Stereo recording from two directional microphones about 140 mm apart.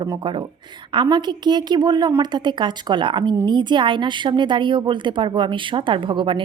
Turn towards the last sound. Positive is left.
turn(degrees=-35)  # may be behind; listen again after turning